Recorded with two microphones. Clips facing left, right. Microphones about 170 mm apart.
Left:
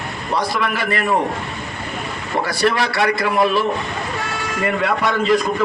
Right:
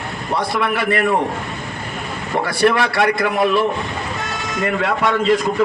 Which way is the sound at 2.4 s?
60° right (ahead or behind).